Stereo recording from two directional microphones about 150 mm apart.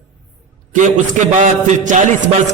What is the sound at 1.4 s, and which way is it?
A man's voice, 55° right (ahead or behind).